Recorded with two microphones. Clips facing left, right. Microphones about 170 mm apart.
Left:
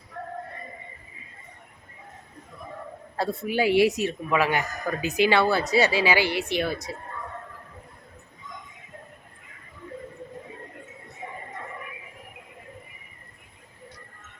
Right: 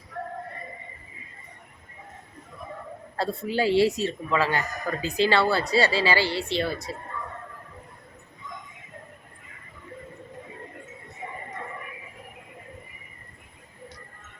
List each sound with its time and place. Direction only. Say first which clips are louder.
3.2 s speech: left 1 dB; 15° left (ahead or behind)